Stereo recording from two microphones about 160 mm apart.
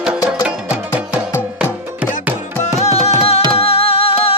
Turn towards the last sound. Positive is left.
turn(degrees=35)  # may be behind; listen again after turning